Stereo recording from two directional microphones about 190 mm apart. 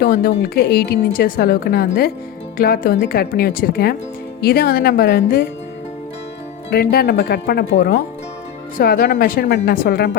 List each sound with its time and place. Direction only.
0.0 s speech: 55° left (ahead or behind)
6.7 s speech: 55° left (ahead or behind)
8.8 s speech: 50° left (ahead or behind)